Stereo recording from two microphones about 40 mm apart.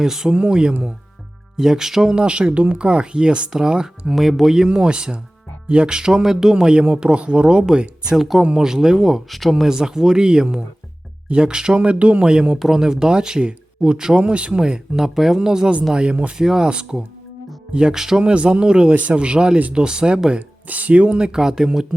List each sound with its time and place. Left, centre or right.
0.0 s speech: centre
1.5 s speech: centre
2.1 s speech: right
4.1 s speech: centre; by 7.6 s right
8.1 s speech: centre
9.6 s speech: centre; by 12.2 s right
12.2 s speech: right
12.5 s speech: centre; by 14.8 s right
14.9 s speech: centre
17.9 s speech: centre
18.2 s speech: right
20.7 s speech: right
21.2 s speech: centre